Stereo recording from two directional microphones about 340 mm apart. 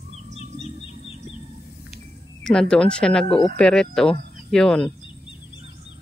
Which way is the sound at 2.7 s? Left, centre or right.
Centre.